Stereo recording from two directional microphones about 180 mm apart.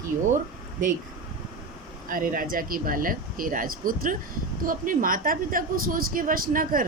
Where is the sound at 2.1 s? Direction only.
50° right (ahead or behind).